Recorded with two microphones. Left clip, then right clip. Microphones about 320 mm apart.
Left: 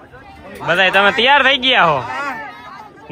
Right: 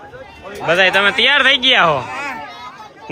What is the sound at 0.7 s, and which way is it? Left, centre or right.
A man's voice, centre.